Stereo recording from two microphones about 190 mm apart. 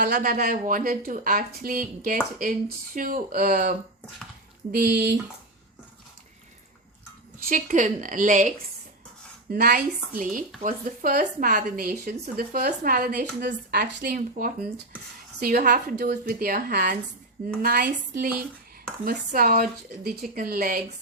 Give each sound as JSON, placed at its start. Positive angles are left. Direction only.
{"t": 0.0, "sound": "a woman's voice", "side_deg": -50}
{"t": 7.4, "sound": "a woman's voice", "side_deg": -45}
{"t": 9.5, "sound": "a woman's voice", "side_deg": -50}